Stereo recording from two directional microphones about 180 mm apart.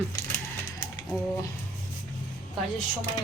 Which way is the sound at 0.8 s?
15° left (ahead or behind).